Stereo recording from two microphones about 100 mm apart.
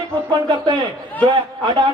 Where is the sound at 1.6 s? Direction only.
50° right (ahead or behind).